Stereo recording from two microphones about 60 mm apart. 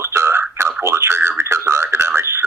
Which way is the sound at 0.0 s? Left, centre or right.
Right.